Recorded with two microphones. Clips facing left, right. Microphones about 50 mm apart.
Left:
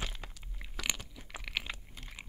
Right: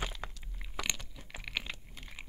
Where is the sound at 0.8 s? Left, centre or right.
Centre.